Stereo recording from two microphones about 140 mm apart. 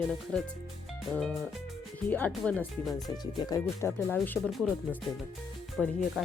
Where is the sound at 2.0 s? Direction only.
10° left (ahead or behind).